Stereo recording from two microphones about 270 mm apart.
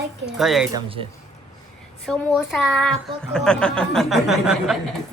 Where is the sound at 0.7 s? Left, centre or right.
Centre.